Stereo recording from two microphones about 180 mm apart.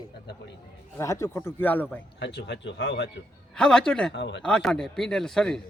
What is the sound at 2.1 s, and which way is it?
Speech, 75° left (ahead or behind).